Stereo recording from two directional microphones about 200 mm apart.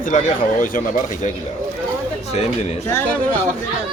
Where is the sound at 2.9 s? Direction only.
10° left (ahead or behind).